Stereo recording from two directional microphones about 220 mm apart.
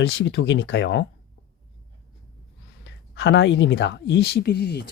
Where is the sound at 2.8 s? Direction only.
55° left (ahead or behind).